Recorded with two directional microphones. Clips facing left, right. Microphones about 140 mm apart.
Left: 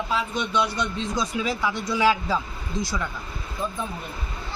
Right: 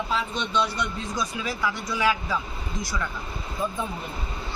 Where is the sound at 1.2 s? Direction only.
25° left (ahead or behind).